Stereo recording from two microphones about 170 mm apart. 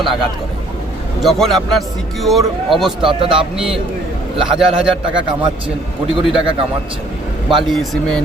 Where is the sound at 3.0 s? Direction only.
30° right (ahead or behind).